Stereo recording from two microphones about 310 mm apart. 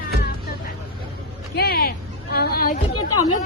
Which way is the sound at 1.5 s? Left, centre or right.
Left.